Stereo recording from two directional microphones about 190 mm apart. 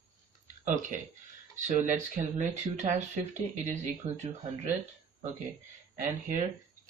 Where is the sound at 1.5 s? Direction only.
40° right (ahead or behind).